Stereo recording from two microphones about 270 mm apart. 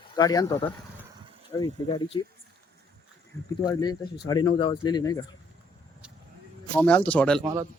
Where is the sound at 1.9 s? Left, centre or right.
Centre.